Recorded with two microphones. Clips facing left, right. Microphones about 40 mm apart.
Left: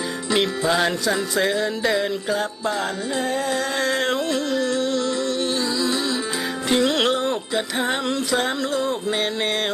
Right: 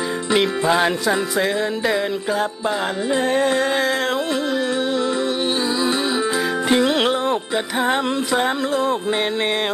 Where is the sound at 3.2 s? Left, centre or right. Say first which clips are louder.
Right 5 dB; right.